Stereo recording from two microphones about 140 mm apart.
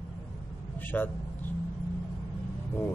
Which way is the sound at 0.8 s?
15° left (ahead or behind).